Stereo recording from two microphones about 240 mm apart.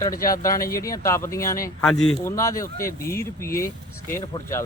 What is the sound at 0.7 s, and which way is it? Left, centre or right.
Speech, centre.